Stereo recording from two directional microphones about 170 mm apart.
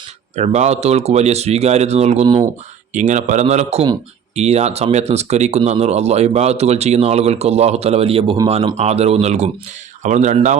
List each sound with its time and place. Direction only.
0.3 s speech: 40° right (ahead or behind)
2.9 s speech: 45° right (ahead or behind)